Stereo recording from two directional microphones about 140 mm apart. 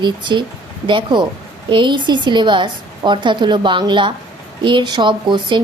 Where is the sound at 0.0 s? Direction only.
35° right (ahead or behind).